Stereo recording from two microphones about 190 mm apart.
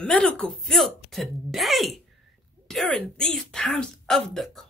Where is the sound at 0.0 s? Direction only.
5° left (ahead or behind).